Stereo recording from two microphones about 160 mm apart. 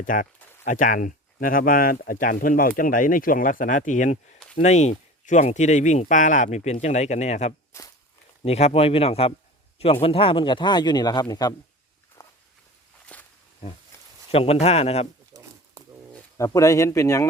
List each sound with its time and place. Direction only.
0.0 s speech: 55° left (ahead or behind); by 11.5 s 25° left (ahead or behind)
12.2 s walk: 20° left (ahead or behind)
13.1 s walk: 10° left (ahead or behind)
14.3 s speech: 40° left (ahead or behind)
15.3 s a sound: 20° right (ahead or behind)
16.4 s speech: 20° left (ahead or behind)